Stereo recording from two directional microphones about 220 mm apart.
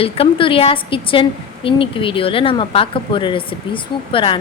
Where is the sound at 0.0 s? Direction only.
25° left (ahead or behind).